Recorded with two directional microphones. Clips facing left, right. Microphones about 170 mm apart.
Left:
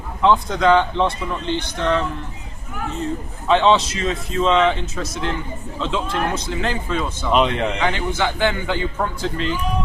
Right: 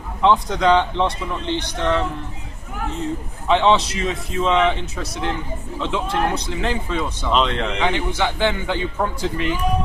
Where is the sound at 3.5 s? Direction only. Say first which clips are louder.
Left 1 dB; 15° right (ahead or behind).